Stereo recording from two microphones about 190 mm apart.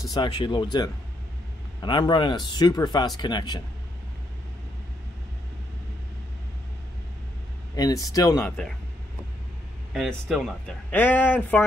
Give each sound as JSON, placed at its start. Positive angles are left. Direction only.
{"t": 0.1, "sound": "speech", "side_deg": 25}
{"t": 7.7, "sound": "speech", "side_deg": 20}
{"t": 9.9, "sound": "speech", "side_deg": 0}